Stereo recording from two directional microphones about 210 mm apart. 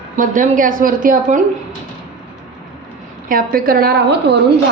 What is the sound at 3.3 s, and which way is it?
Speech, 45° right (ahead or behind).